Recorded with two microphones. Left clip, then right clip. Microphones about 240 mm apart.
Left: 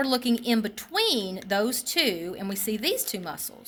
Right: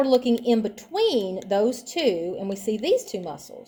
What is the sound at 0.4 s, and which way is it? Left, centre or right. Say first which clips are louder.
Speech: right 5 dB; left.